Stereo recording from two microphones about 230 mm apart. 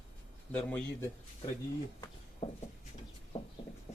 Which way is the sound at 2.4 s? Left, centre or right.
Left.